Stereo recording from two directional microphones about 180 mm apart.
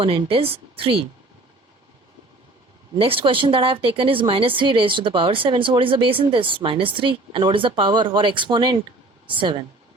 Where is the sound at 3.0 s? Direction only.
30° right (ahead or behind).